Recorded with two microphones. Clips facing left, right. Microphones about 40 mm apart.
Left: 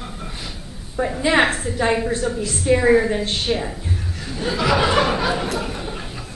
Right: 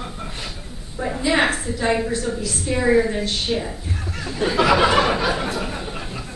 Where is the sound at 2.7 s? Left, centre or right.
Centre.